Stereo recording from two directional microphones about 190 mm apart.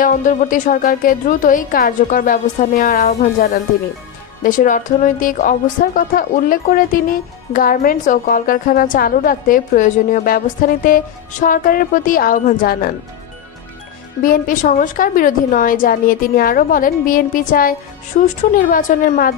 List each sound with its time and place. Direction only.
0.0 s a woman's voice: 45° left (ahead or behind)
14.2 s a woman's voice: 45° left (ahead or behind)